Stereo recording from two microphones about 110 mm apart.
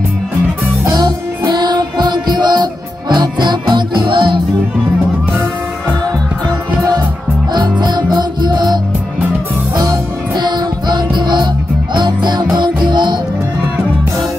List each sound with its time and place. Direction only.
0.8 s music: 35° right (ahead or behind)
7.8 s music: 40° right (ahead or behind)